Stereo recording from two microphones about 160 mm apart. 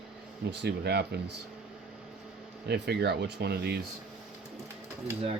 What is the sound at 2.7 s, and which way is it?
Speech, 90° right.